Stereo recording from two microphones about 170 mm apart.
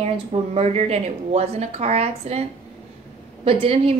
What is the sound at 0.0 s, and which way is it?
A woman's voice, 35° right (ahead or behind).